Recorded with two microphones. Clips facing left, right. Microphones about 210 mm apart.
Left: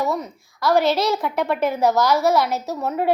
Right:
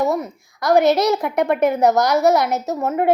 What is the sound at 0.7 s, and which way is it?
A woman's voice, 60° right (ahead or behind).